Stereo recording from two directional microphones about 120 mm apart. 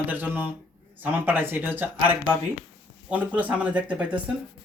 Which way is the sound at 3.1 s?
15° right (ahead or behind).